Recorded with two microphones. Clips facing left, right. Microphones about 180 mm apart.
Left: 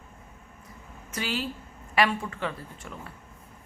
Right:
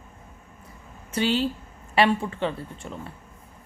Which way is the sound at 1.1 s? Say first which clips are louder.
Right 8 dB; 30° right (ahead or behind).